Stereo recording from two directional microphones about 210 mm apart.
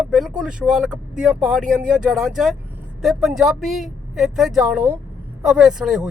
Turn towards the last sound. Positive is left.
turn(degrees=0)  # may be behind; listen again after turning